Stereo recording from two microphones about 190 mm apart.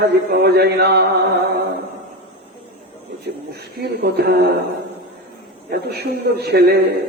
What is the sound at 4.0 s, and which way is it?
Speech, 55° right (ahead or behind).